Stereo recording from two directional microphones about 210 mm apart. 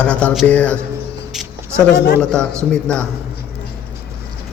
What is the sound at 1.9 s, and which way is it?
Speech, 50° left (ahead or behind).